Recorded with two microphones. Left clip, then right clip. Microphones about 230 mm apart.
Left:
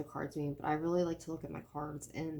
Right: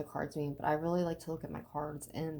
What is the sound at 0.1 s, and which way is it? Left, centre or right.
A woman's voice, right.